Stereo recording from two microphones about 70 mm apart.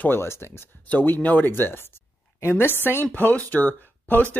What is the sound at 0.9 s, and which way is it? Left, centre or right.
A woman's voice, left.